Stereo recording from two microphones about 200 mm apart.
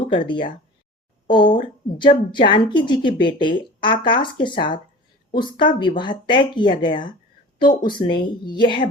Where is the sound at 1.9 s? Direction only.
25° left (ahead or behind).